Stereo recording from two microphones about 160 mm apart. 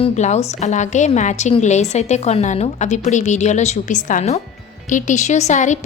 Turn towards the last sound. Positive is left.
turn(degrees=50)  # may be behind; listen again after turning